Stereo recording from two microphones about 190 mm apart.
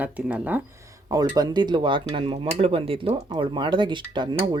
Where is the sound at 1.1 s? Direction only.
20° right (ahead or behind).